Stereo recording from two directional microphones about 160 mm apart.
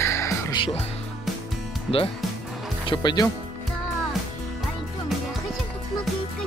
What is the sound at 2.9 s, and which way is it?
Speech, 25° left (ahead or behind).